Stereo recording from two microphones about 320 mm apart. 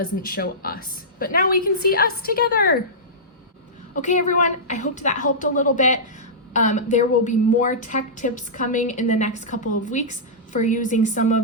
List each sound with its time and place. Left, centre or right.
0.2 s a woman's voice: left
3.9 s a woman's voice: left